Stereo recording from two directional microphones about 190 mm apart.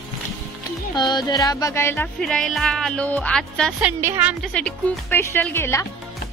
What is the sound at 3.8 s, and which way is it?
Speech, 10° right (ahead or behind).